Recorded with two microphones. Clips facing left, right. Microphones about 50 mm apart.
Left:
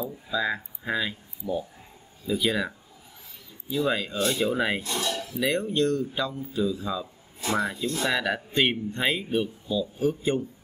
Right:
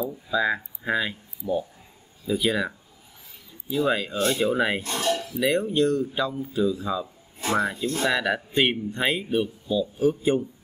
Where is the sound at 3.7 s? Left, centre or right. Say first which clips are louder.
Right 2 dB; centre.